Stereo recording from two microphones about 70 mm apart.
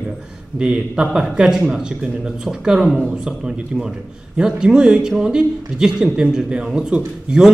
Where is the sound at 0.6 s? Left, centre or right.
Centre.